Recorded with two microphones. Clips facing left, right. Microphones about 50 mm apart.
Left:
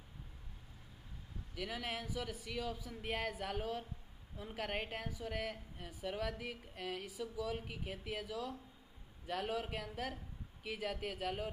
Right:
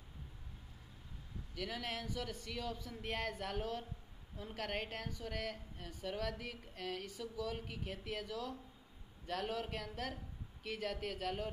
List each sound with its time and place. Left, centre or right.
1.5 s a woman's voice: centre